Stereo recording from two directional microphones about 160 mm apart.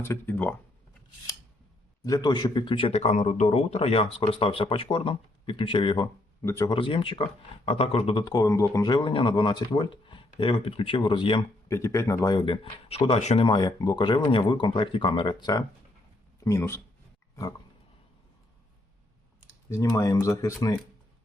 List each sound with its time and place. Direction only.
0.0 s speech: 15° left (ahead or behind)
2.0 s a man's voice: 20° left (ahead or behind)
6.4 s speech: 20° left (ahead or behind)
6.7 s a man's voice: 35° left (ahead or behind)
8.2 s a man's voice: 20° left (ahead or behind)
11.7 s speech: 20° left (ahead or behind); by 13.4 s 40° left (ahead or behind)
13.4 s speech: 25° left (ahead or behind)
16.4 s speech: 15° left (ahead or behind)
19.7 s speech: 20° left (ahead or behind)